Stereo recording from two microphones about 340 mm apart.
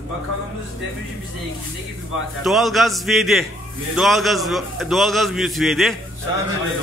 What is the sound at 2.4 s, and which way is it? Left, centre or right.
A man's voice, centre.